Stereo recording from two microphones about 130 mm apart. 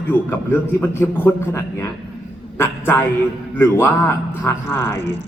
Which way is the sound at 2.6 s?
15° left (ahead or behind).